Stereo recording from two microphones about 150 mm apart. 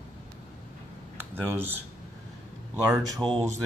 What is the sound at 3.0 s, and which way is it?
Speech, centre (ahead or behind).